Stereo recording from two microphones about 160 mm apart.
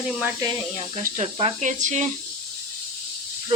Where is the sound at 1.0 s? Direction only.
50° right (ahead or behind).